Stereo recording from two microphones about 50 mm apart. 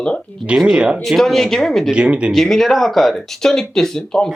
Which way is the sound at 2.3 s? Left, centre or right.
Centre.